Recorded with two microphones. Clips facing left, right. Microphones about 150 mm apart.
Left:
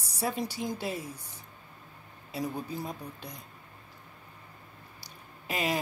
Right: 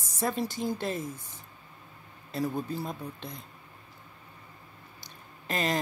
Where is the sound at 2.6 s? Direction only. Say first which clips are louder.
Right 2 dB; 10° left (ahead or behind).